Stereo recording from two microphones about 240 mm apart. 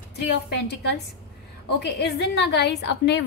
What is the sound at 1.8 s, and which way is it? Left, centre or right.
Speech, left.